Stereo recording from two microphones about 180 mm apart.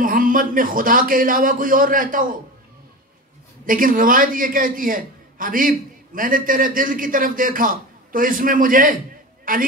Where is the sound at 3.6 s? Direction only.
50° right (ahead or behind).